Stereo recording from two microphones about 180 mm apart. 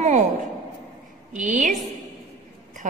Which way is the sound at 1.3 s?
45° right (ahead or behind).